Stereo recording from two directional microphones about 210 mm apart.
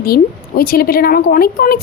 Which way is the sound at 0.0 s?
45° left (ahead or behind).